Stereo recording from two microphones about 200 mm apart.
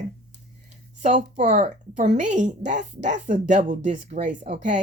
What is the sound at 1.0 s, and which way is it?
A woman's voice, 35° right (ahead or behind).